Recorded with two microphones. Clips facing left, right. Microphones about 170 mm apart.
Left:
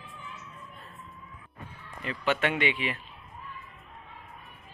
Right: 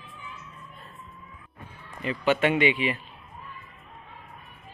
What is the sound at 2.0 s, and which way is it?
Speech, 5° right (ahead or behind).